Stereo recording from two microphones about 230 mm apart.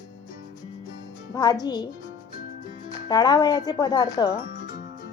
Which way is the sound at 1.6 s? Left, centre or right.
Centre.